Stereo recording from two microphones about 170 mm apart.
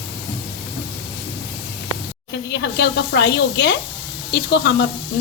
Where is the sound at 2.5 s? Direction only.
80° left.